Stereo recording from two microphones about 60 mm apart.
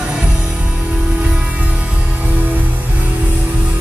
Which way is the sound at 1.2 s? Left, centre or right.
Right.